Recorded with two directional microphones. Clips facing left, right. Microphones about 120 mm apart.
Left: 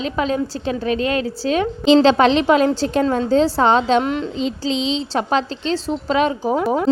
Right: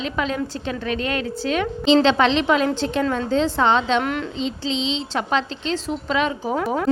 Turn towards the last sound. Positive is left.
turn(degrees=25)  # may be behind; listen again after turning